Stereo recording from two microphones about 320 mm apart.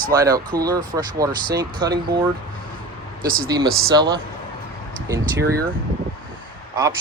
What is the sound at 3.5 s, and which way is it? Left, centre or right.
Speech, centre.